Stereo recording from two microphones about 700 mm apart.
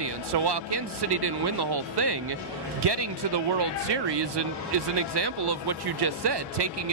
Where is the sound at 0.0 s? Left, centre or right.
Right.